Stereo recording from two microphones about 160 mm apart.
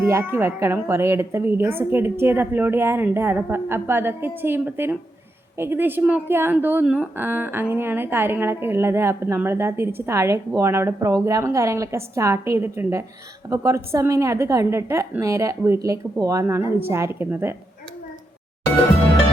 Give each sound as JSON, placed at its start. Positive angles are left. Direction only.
{"t": 0.0, "sound": "speech", "side_deg": -15}